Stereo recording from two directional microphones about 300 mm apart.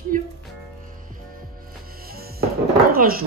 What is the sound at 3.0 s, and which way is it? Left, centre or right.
Speech, right.